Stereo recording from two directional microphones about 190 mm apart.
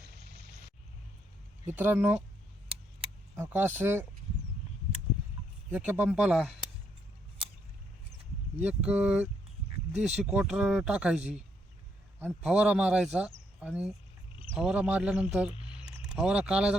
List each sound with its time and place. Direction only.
1.6 s speech: 10° right (ahead or behind)
3.3 s speech: 10° right (ahead or behind)
5.7 s speech: 10° right (ahead or behind)
7.4 s a sound: 30° right (ahead or behind)
8.6 s speech: 5° right (ahead or behind)